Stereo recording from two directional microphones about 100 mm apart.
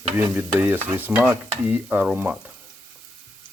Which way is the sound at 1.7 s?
15° right (ahead or behind).